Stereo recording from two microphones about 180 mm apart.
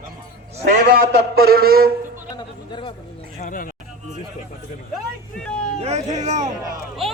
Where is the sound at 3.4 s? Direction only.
45° left (ahead or behind).